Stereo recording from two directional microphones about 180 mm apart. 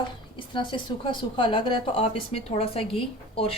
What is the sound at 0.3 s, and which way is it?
A woman's voice, 25° left (ahead or behind).